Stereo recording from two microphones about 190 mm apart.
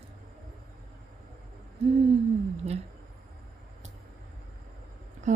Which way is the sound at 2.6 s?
30° right (ahead or behind).